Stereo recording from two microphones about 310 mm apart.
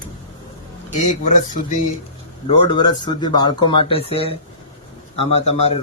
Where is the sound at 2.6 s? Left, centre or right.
Centre.